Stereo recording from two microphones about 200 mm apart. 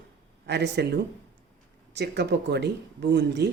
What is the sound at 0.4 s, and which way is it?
Speech, 55° right (ahead or behind).